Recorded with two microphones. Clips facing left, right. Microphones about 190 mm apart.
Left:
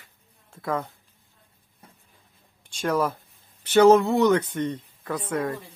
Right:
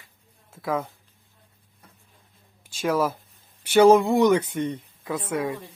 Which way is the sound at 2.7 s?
5° right (ahead or behind).